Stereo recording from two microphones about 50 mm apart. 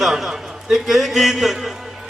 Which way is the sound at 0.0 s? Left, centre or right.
Centre.